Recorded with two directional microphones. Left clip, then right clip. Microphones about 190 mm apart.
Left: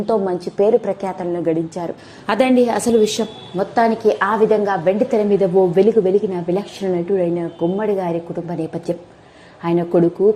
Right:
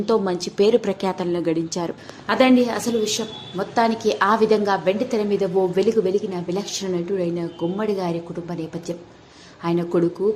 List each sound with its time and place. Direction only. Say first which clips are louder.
0.0 s a woman's voice: left 2 dB; centre (ahead or behind)
2.2 s a woman's voice: left 2 dB; 35° left (ahead or behind)
3.6 s a woman's voice: left 4 dB; 20° left (ahead or behind)
4.9 s a woman's voice: left 6 dB; 20° left (ahead or behind)